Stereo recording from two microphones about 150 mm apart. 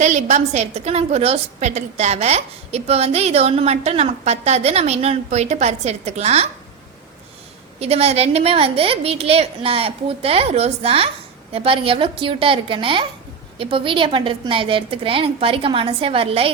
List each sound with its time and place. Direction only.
0.0 s a woman's voice: 50° right (ahead or behind)
7.8 s a woman's voice: 45° right (ahead or behind)